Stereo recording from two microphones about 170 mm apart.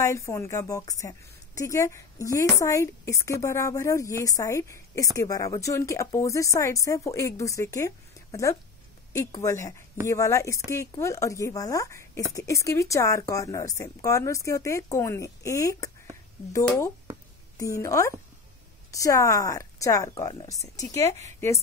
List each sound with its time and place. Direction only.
0.0 s a woman's voice: 20° left (ahead or behind)